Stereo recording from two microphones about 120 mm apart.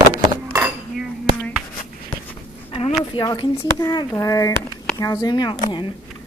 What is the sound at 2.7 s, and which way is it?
Speech, 55° left (ahead or behind).